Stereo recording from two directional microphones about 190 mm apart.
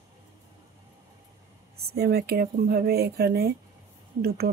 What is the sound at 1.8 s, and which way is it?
Speech, 55° right (ahead or behind).